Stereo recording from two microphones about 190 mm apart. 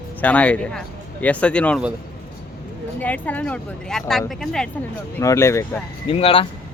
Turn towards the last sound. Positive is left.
turn(degrees=30)  # may be behind; listen again after turning